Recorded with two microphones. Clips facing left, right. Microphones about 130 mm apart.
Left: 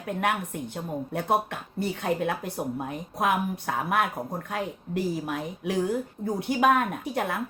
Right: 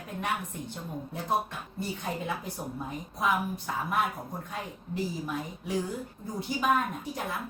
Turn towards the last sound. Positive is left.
turn(degrees=65)  # may be behind; listen again after turning